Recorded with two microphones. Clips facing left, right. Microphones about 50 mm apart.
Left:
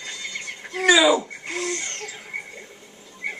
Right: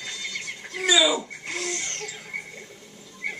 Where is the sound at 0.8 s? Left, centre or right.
Left.